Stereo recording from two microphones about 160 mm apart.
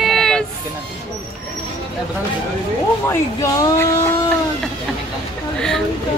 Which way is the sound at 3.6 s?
20° left (ahead or behind).